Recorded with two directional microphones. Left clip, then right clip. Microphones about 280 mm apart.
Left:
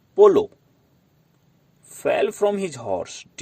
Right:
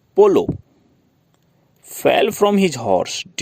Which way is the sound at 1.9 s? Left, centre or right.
Right.